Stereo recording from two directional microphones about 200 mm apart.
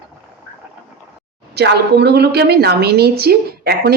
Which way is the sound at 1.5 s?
55° right (ahead or behind).